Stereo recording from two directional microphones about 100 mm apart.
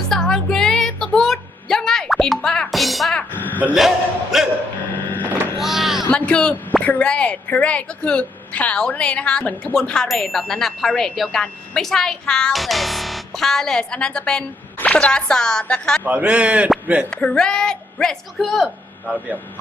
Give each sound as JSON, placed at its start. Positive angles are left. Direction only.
{"t": 0.1, "sound": "music", "side_deg": 5}
{"t": 3.3, "sound": "a sound", "side_deg": 20}
{"t": 3.8, "sound": "a man's voice", "side_deg": 0}
{"t": 4.9, "sound": "printer", "side_deg": 15}
{"t": 5.5, "sound": "a sound", "side_deg": 0}
{"t": 6.1, "sound": "a man's voice", "side_deg": 10}
{"t": 16.0, "sound": "a man's voice", "side_deg": -15}
{"t": 17.1, "sound": "a man's voice", "side_deg": 10}